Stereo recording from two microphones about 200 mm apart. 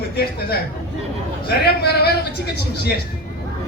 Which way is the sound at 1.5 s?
55° left (ahead or behind).